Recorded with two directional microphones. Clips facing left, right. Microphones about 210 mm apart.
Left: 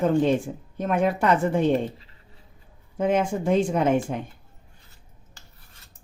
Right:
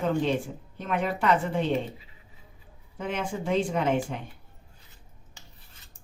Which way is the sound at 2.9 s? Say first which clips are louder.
Left 9 dB; 45° left (ahead or behind).